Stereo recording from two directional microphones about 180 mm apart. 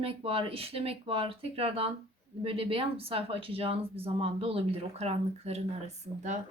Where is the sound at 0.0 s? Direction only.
30° right (ahead or behind).